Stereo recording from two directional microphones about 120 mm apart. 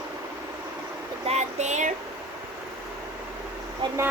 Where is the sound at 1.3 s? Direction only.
70° right (ahead or behind).